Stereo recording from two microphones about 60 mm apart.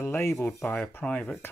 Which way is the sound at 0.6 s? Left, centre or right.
Left.